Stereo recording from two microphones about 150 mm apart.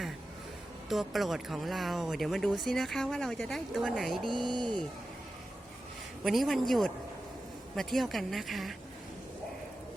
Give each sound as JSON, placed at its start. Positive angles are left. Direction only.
{"t": 0.9, "sound": "speech", "side_deg": 0}
{"t": 4.4, "sound": "speech", "side_deg": -30}
{"t": 6.2, "sound": "speech", "side_deg": 0}